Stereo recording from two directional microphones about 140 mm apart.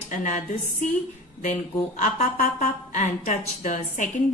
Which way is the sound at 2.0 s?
65° left (ahead or behind).